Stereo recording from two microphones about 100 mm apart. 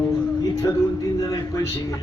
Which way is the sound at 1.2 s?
30° left (ahead or behind).